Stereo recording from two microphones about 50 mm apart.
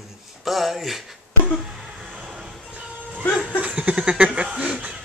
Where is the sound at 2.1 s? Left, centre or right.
Right.